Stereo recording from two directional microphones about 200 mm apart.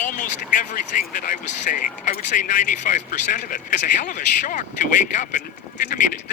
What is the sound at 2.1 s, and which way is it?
A man's voice, 40° left (ahead or behind).